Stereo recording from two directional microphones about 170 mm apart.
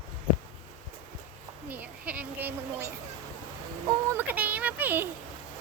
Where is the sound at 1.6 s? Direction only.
10° right (ahead or behind).